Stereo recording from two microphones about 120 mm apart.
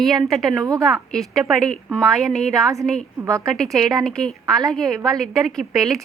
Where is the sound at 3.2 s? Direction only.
25° right (ahead or behind).